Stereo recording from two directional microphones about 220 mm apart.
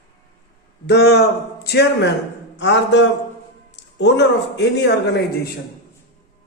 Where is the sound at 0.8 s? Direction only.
50° left (ahead or behind).